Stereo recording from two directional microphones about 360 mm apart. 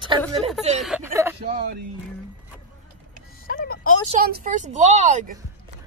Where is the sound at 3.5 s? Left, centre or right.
Left.